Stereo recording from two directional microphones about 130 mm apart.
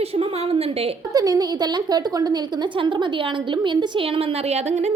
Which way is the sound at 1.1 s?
30° right (ahead or behind).